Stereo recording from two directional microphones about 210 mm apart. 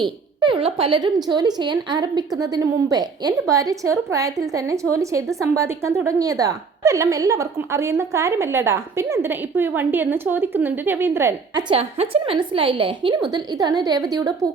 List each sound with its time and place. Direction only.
0.3 s a woman's voice: 25° right (ahead or behind)
11.7 s speech: 25° right (ahead or behind)